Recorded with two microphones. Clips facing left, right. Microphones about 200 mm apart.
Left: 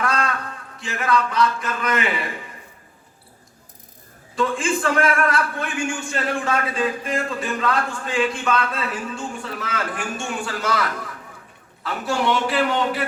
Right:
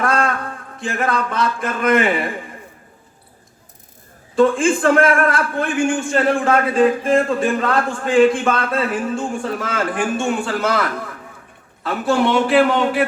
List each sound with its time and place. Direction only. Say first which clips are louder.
0.0 s a man's voice: right 5 dB; 50° right (ahead or behind)
4.4 s a man's voice: right 8 dB; 50° right (ahead or behind)